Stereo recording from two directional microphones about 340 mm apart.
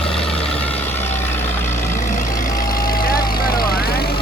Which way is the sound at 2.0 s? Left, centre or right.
Left.